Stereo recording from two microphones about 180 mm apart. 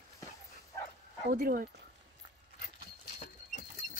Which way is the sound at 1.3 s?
55° right (ahead or behind).